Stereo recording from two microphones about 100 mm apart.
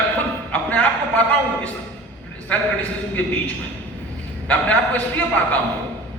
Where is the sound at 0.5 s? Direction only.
15° left (ahead or behind).